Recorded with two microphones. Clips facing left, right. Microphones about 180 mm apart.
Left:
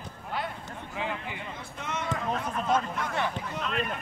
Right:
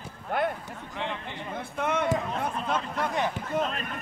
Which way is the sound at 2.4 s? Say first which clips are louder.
Left 2 dB; 55° right (ahead or behind).